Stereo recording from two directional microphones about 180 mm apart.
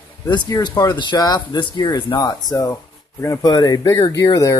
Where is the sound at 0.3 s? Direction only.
20° left (ahead or behind).